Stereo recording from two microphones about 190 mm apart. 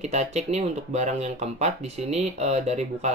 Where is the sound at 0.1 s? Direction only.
35° right (ahead or behind).